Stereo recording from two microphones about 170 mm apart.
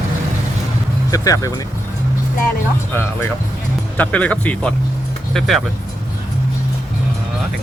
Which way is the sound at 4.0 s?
10° left (ahead or behind).